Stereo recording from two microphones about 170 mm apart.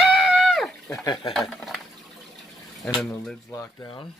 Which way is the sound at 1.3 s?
Centre (ahead or behind).